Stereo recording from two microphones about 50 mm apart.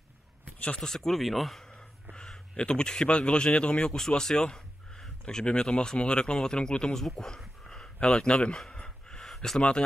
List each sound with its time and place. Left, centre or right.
0.7 s speech: centre
2.1 s speech: centre
8.7 s gasp: centre
9.3 s a sound: centre
9.6 s speech: centre